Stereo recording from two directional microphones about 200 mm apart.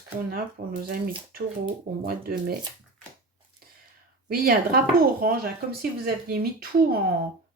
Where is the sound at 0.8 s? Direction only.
50° right (ahead or behind).